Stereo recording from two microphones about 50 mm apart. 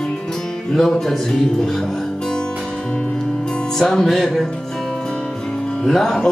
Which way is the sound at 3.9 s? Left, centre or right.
Centre.